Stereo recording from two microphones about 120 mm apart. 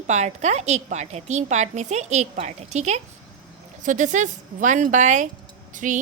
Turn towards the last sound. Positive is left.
turn(degrees=-90)